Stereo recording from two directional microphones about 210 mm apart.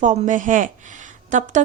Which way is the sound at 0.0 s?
35° right (ahead or behind).